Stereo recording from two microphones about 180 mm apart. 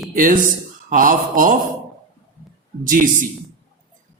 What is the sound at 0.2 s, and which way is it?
Speech, 50° right (ahead or behind).